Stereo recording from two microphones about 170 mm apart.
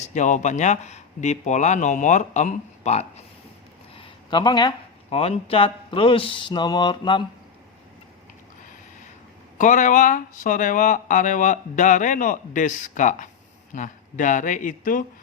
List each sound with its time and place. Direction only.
0.0 s speech: 45° left (ahead or behind)
3.9 s speech: 30° left (ahead or behind)
9.6 s speech: 50° left (ahead or behind)